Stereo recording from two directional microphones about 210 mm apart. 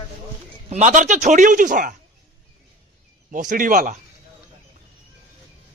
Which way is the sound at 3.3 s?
35° right (ahead or behind).